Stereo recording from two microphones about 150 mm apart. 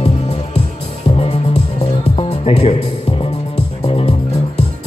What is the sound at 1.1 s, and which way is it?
Music, 40° left (ahead or behind).